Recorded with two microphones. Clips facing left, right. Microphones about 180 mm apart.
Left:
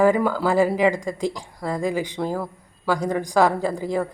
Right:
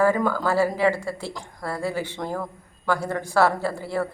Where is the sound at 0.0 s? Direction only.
15° left (ahead or behind).